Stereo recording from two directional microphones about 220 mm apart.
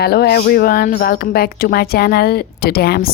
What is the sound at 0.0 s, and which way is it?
A woman's voice, 45° left (ahead or behind).